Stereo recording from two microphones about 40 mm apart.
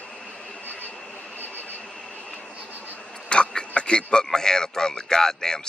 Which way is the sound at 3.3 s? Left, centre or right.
Left.